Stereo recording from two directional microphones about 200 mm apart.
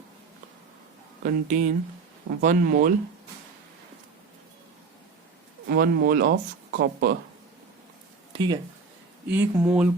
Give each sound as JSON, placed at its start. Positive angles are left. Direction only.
{"t": 1.2, "sound": "speech", "side_deg": -40}
{"t": 5.6, "sound": "speech", "side_deg": -50}
{"t": 8.3, "sound": "a sound", "side_deg": -25}
{"t": 9.3, "sound": "speech", "side_deg": -10}